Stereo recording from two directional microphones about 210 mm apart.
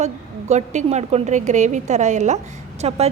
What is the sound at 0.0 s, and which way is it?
A woman's voice, 35° right (ahead or behind).